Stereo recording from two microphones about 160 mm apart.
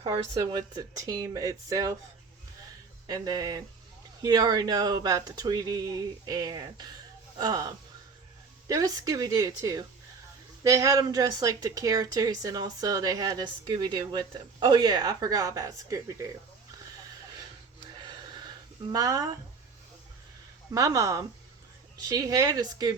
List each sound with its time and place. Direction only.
0.0 s speech: 25° right (ahead or behind)
3.1 s speech: 25° right (ahead or behind)
18.0 s a sound: 25° right (ahead or behind)
18.9 s speech: 20° right (ahead or behind)
20.7 s speech: 20° right (ahead or behind)